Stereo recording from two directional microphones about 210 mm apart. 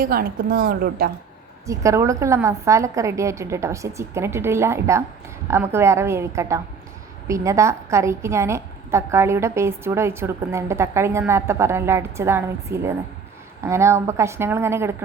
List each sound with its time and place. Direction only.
0.0 s a woman's voice: 45° right (ahead or behind)
1.6 s a woman's voice: 15° right (ahead or behind)